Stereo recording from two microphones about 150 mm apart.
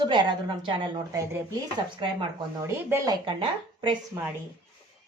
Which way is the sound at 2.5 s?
20° right (ahead or behind).